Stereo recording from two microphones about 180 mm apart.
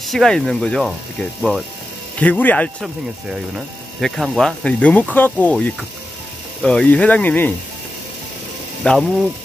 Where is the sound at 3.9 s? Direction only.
Centre (ahead or behind).